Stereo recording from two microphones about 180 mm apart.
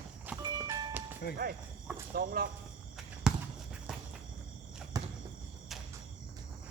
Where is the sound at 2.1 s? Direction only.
55° right (ahead or behind).